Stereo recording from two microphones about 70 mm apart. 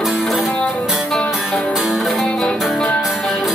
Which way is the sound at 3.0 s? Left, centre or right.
Centre.